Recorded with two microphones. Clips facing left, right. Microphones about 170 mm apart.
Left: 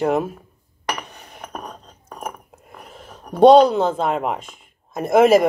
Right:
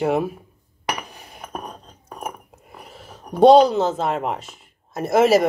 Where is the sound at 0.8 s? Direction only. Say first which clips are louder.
Even; 5° right (ahead or behind).